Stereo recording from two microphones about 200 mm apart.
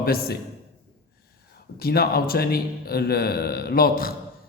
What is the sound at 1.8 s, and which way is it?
Speech, 50° left (ahead or behind).